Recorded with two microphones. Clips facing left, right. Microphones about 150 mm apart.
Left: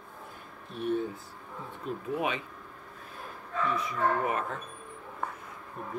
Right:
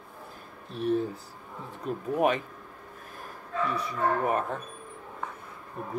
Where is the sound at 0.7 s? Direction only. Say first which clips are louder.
Right 3 dB; 35° right (ahead or behind).